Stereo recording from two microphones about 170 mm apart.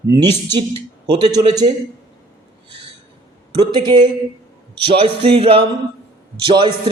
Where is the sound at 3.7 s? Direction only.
25° right (ahead or behind).